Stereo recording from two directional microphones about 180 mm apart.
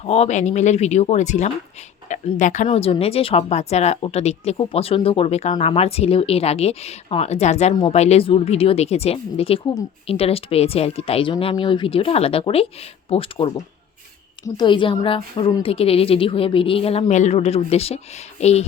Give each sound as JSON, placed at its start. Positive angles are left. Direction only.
{"t": 0.0, "sound": "speech", "side_deg": 35}
{"t": 2.6, "sound": "a woman's voice", "side_deg": 30}